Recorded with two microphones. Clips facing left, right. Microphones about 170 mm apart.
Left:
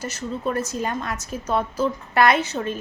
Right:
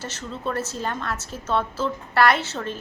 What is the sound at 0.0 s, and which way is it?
A woman's voice, 10° left (ahead or behind).